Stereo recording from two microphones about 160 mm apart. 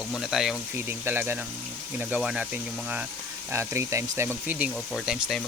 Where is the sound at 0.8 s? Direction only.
15° right (ahead or behind).